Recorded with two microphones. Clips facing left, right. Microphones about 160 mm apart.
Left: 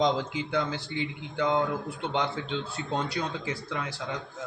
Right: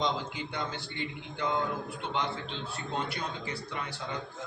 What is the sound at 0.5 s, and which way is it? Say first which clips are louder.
Speech: left 9 dB; 90° left.